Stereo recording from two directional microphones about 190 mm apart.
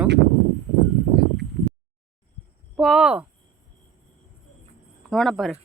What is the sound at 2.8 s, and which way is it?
Speech, centre (ahead or behind).